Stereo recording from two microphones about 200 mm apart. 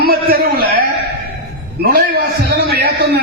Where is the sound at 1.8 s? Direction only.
50° right (ahead or behind).